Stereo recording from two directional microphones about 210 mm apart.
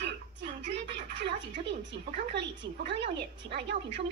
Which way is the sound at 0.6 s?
55° right (ahead or behind).